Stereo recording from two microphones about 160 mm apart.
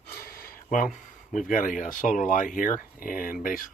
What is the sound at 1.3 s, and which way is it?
Speech, 50° left (ahead or behind).